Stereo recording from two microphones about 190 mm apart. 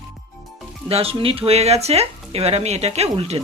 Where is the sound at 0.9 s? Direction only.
30° right (ahead or behind).